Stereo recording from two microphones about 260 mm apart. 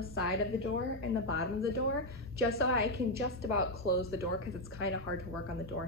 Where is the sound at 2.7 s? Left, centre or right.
Right.